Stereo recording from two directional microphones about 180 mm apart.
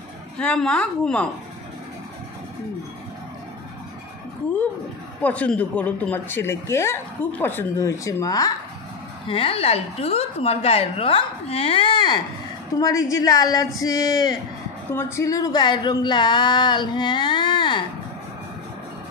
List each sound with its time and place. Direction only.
0.4 s a woman's voice: 5° left (ahead or behind)
5.2 s a woman's voice: 10° left (ahead or behind)
9.3 s a woman's voice: 30° left (ahead or behind)